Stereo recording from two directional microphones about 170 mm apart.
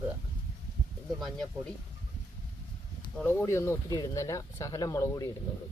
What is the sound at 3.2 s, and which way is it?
Speech, 15° left (ahead or behind).